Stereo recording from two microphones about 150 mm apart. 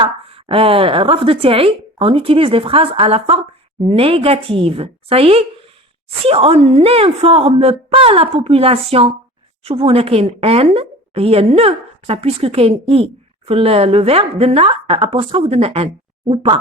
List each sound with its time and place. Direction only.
0.0 s a woman's voice: 40° right (ahead or behind)